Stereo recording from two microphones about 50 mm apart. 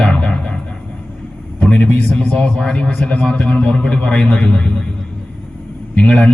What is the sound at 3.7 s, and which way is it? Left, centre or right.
A man's voice, centre.